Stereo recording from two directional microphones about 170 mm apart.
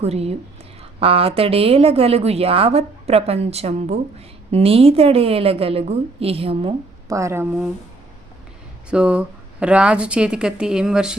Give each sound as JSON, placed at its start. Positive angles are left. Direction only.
{"t": 0.0, "sound": "a woman's voice", "side_deg": -35}
{"t": 7.1, "sound": "speech", "side_deg": -15}
{"t": 8.9, "sound": "a woman's voice", "side_deg": -5}